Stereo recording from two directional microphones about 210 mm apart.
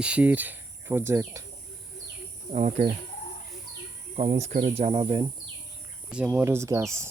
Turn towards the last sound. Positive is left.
turn(degrees=-15)  # may be behind; listen again after turning